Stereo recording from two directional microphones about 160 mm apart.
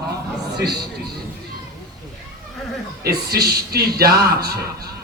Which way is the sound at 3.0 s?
80° right.